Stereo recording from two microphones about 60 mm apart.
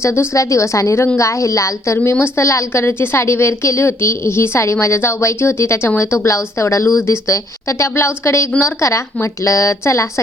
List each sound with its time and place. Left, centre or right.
0.0 s a woman's voice: left
0.3 s a woman's voice: left
2.0 s a woman's voice: left
2.8 s a woman's voice: left